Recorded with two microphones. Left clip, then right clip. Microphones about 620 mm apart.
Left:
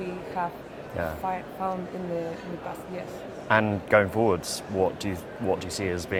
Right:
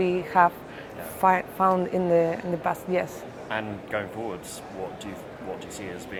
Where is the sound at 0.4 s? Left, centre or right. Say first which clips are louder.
Right 11 dB; right.